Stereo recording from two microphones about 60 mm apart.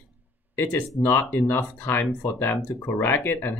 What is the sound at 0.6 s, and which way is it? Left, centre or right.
Speech, left.